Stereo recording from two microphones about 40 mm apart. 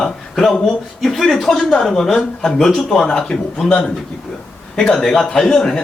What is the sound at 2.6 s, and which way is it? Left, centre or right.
Speech, centre.